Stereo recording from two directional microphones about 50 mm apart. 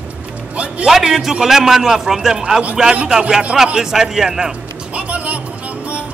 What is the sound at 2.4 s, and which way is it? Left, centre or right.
A man's voice, centre.